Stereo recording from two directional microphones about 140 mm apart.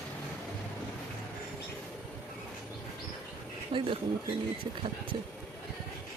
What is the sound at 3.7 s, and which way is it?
Speech, 35° right (ahead or behind).